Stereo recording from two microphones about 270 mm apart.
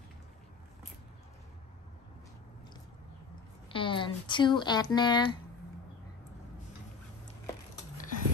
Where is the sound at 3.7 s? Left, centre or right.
Centre.